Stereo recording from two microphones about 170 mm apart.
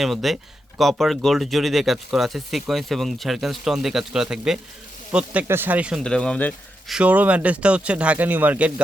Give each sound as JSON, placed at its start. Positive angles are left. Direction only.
{"t": 0.0, "sound": "speech", "side_deg": 0}
{"t": 6.0, "sound": "speech", "side_deg": 5}